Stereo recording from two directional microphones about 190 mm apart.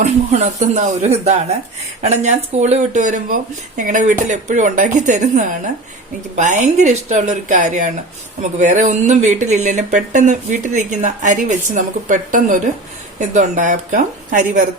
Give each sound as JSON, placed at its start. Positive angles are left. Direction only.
{"t": 0.0, "sound": "speech", "side_deg": -35}